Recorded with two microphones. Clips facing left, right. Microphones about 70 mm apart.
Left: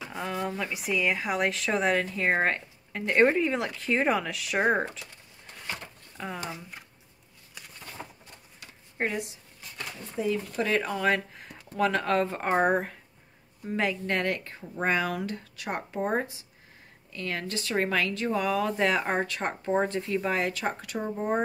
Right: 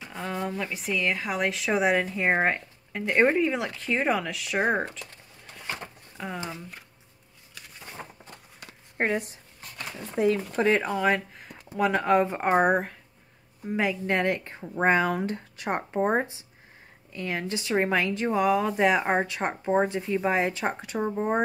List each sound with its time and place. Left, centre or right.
0.2 s a sound: centre
0.6 s speech: centre
6.1 s speech: centre
8.9 s a sound: right
10.1 s speech: right
10.6 s speech: right
11.0 s speech: centre
11.8 s speech: centre
20.2 s speech: right